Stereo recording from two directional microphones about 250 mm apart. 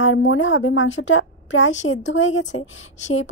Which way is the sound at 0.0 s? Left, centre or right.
Left.